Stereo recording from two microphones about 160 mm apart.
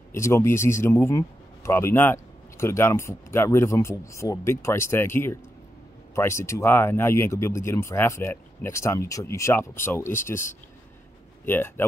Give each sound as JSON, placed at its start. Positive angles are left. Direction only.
{"t": 0.1, "sound": "speech", "side_deg": 15}